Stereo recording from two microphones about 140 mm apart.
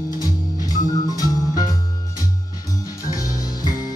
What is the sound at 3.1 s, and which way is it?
Music, 25° left (ahead or behind).